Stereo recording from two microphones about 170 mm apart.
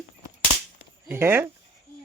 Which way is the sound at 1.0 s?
15° right (ahead or behind).